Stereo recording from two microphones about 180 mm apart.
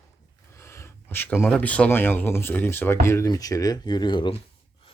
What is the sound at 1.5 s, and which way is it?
Speech, 5° left (ahead or behind).